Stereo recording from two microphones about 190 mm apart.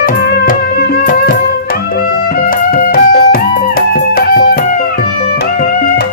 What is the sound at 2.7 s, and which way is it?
Music, 50° left (ahead or behind).